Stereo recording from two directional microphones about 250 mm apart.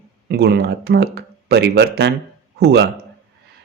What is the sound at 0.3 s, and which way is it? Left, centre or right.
Speech, right.